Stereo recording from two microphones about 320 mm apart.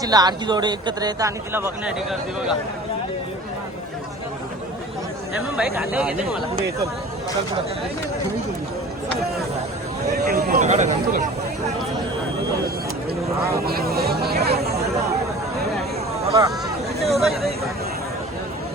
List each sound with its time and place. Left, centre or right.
0.0 s speech: centre
5.5 s speech: centre
10.2 s speech: right
13.7 s vehicle: right
16.2 s a sound: centre
17.2 s speech: centre